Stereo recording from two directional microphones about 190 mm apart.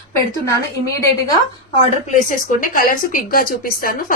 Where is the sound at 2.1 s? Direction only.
45° left (ahead or behind).